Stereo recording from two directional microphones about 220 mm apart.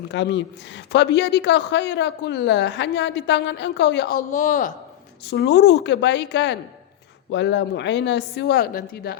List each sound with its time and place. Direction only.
0.1 s a woman's voice: 55° left (ahead or behind); by 4.7 s 35° left (ahead or behind)
5.2 s a woman's voice: 50° left (ahead or behind)